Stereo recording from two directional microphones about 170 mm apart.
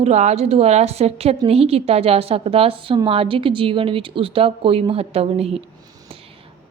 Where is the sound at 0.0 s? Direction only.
40° right (ahead or behind).